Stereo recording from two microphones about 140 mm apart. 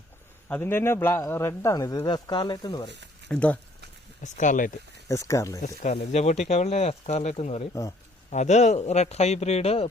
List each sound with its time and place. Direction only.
0.4 s a man's voice: 15° left (ahead or behind); by 2.9 s 35° left (ahead or behind)
3.2 s a man's voice: 10° left (ahead or behind)
4.2 s speech: 65° left (ahead or behind)
5.0 s speech: 20° left (ahead or behind)
5.6 s speech: 55° left (ahead or behind)
7.7 s speech: 20° left (ahead or behind)
8.3 s speech: 55° left (ahead or behind)